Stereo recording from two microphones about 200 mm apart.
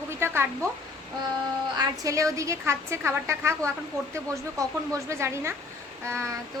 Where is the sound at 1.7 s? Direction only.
15° right (ahead or behind).